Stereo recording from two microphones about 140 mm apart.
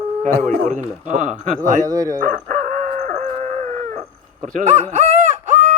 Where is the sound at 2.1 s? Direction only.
70° right (ahead or behind).